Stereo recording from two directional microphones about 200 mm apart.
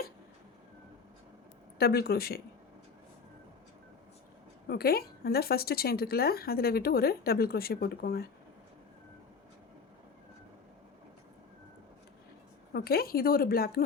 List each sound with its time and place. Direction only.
1.8 s speech: 50° left (ahead or behind)
4.7 s speech: 50° left (ahead or behind)
12.7 s speech: 50° left (ahead or behind)